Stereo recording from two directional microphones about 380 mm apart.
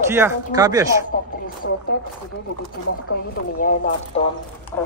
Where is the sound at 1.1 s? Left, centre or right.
Left.